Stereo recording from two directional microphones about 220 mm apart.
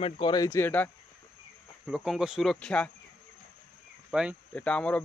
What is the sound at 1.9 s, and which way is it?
Speech, centre (ahead or behind).